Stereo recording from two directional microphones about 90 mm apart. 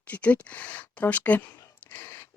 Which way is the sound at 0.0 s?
15° left (ahead or behind).